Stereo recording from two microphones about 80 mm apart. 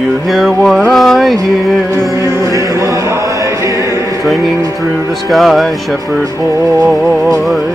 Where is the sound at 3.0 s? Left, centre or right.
Right.